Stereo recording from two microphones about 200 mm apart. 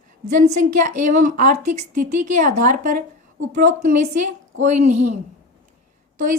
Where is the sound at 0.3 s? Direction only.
40° right (ahead or behind).